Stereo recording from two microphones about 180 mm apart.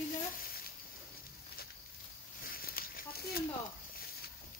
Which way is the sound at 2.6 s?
55° left (ahead or behind).